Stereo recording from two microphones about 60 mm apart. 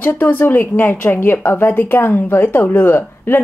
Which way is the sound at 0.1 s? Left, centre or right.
Left.